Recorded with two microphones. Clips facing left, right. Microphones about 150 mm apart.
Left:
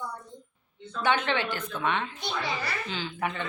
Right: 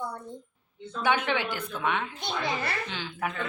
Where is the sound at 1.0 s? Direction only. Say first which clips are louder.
Even; 10° right (ahead or behind).